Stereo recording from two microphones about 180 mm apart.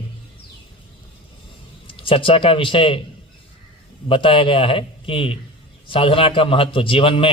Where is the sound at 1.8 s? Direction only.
30° left (ahead or behind).